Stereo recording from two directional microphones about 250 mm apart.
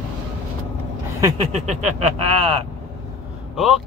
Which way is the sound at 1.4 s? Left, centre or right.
Right.